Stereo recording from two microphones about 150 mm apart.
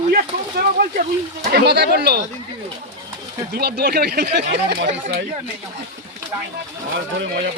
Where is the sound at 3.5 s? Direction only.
90° right.